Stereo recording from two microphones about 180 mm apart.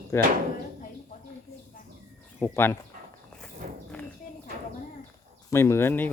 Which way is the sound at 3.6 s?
50° right (ahead or behind).